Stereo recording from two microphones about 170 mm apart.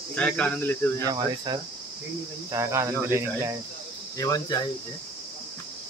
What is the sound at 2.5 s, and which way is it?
Speech, 15° right (ahead or behind).